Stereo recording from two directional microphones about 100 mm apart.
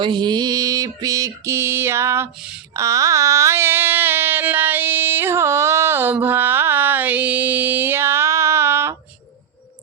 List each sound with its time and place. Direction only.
0.0 s mantra: 50° right (ahead or behind); by 2.3 s 25° right (ahead or behind)
2.7 s carnatic music: 30° right (ahead or behind)